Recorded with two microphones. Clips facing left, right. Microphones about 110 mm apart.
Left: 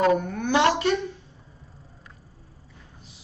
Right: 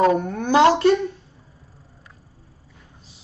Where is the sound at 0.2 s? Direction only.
35° right (ahead or behind).